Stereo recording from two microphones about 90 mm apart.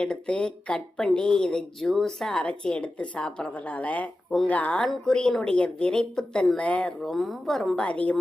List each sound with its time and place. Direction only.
0.0 s speech: 10° left (ahead or behind)
6.6 s speech: 15° left (ahead or behind)
7.8 s speech: 15° left (ahead or behind)